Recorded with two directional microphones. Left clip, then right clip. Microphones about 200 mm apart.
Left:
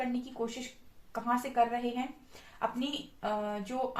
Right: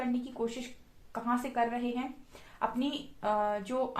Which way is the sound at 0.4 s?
40° right (ahead or behind).